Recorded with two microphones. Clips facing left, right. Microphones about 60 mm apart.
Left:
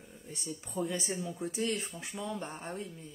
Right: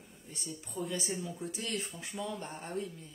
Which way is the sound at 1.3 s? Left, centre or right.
Left.